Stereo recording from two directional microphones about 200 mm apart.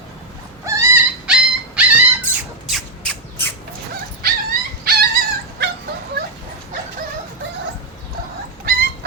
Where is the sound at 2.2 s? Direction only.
5° right (ahead or behind).